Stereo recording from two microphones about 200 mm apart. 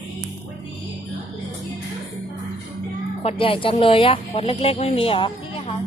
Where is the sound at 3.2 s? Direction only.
25° left (ahead or behind).